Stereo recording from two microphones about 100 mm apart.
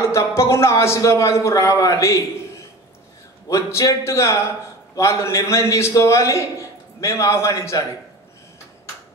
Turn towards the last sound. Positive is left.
turn(degrees=30)  # may be behind; listen again after turning